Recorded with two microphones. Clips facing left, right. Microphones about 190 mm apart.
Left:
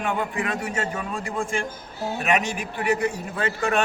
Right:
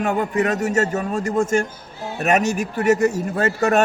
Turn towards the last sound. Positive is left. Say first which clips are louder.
# right 6 dB
turn(degrees=-40)  # may be behind; listen again after turning